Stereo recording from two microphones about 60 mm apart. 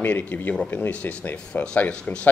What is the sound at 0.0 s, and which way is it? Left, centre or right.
A man's voice, left.